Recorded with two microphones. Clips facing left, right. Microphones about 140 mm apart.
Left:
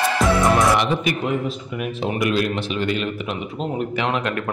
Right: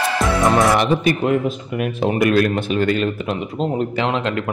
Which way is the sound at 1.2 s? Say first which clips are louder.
Right 5 dB; 55° right (ahead or behind).